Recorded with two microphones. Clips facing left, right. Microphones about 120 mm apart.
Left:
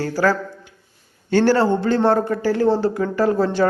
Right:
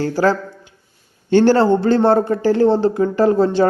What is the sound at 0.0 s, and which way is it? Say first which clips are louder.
A man's voice: right 3 dB; 20° right (ahead or behind).